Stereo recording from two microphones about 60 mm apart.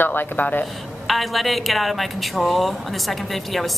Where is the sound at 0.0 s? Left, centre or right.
Left.